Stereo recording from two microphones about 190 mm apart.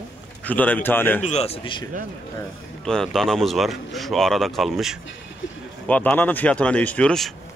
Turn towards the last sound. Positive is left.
turn(degrees=5)  # may be behind; listen again after turning